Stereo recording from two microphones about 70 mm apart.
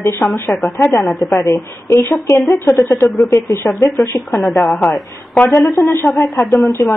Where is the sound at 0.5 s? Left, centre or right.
Left.